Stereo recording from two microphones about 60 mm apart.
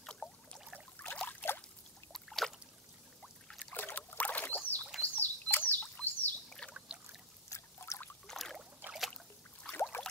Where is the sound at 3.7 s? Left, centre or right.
Left.